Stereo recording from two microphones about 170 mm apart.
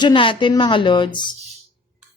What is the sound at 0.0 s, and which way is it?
A woman's voice, 30° left (ahead or behind).